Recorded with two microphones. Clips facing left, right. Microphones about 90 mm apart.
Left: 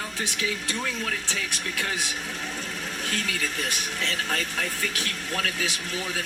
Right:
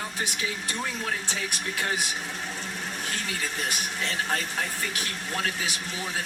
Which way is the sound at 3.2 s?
30° right (ahead or behind).